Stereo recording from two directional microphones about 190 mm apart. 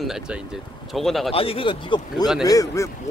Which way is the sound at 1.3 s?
30° left (ahead or behind).